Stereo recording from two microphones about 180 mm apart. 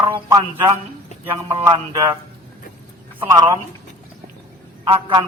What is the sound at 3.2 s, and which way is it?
Speech, 20° right (ahead or behind).